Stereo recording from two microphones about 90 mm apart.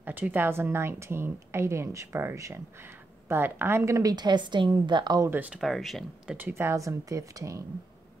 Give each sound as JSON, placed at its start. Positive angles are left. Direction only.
{"t": 0.0, "sound": "a woman's voice", "side_deg": -20}
{"t": 5.5, "sound": "speech", "side_deg": 0}
{"t": 6.3, "sound": "speech", "side_deg": -25}